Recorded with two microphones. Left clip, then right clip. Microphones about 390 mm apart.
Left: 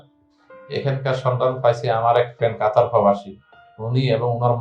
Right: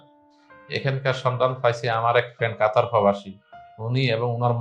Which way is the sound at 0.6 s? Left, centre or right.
Right.